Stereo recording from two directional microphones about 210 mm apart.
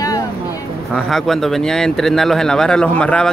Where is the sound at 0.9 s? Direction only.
Centre (ahead or behind).